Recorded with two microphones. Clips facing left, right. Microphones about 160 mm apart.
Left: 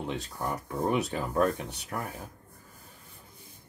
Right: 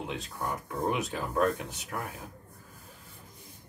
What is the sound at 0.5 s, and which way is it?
Speech, 40° left (ahead or behind).